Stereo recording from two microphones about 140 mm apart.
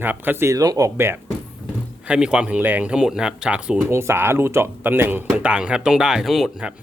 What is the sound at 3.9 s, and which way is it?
Speech, 20° right (ahead or behind).